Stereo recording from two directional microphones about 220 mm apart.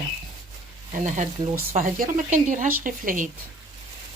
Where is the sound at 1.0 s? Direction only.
35° right (ahead or behind).